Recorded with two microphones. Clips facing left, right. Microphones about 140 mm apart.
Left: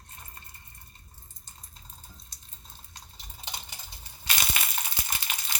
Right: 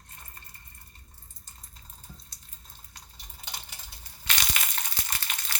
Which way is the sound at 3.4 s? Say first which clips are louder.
Left 2 dB; 25° left (ahead or behind).